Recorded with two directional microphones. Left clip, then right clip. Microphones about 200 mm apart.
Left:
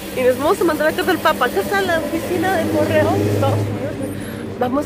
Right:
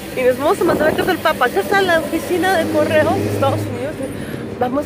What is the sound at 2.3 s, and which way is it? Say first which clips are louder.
Speech: right 3 dB; 45° right (ahead or behind).